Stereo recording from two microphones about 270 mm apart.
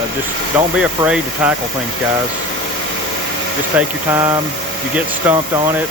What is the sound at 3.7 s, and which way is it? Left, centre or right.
Speech, centre.